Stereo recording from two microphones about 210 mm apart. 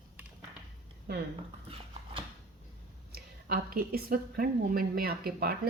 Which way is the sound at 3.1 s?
45° right (ahead or behind).